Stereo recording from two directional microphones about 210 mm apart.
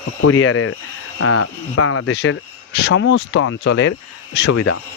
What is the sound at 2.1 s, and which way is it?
Speech, 60° left (ahead or behind).